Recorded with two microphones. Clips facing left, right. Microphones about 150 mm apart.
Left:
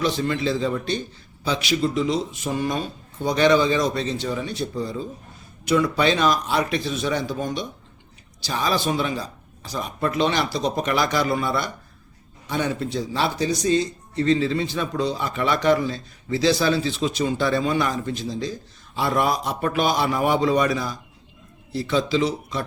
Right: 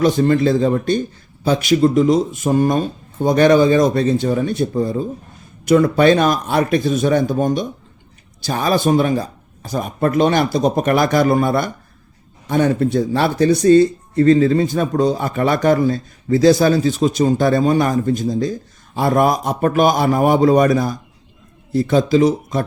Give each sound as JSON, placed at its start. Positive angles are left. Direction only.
{"t": 0.0, "sound": "speech", "side_deg": -50}